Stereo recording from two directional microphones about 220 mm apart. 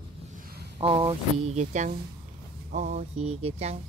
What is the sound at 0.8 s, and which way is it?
Speech, 25° right (ahead or behind).